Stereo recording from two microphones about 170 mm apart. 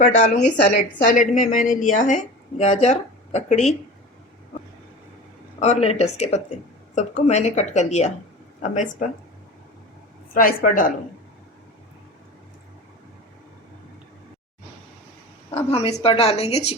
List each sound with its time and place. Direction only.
0.0 s a woman's voice: 45° left (ahead or behind)
5.5 s a woman's voice: 40° left (ahead or behind)
10.3 s a woman's voice: 55° left (ahead or behind)
15.5 s a woman's voice: 40° left (ahead or behind)